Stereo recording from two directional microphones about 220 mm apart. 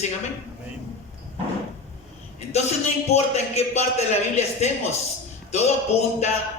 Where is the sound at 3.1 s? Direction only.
30° left (ahead or behind).